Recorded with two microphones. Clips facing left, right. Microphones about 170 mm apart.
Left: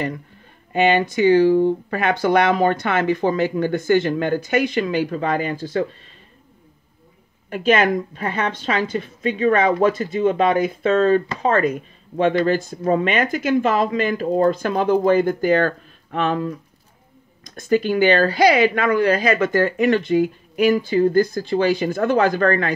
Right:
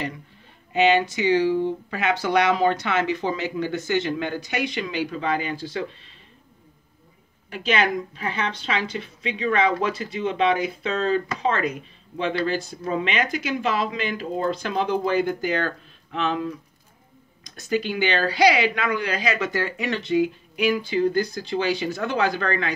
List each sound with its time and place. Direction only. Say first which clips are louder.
0.7 s a woman's voice: left 2 dB; 55° left (ahead or behind)
7.4 s a woman's voice: left 6 dB; 45° left (ahead or behind)